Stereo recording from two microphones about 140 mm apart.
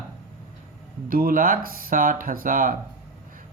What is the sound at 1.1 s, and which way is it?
Speech, 90° right.